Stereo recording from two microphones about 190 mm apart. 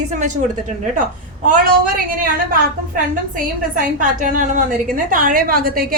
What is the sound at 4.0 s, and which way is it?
A woman's voice, 40° right (ahead or behind).